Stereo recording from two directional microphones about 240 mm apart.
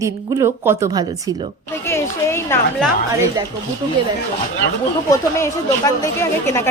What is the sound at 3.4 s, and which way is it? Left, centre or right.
Speech, centre.